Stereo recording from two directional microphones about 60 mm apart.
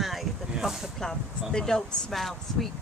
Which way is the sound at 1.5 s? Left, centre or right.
Centre.